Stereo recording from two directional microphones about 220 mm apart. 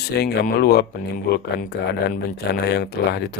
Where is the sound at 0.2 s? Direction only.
45° left (ahead or behind).